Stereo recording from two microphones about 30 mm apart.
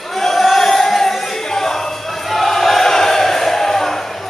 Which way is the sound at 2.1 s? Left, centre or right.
Centre.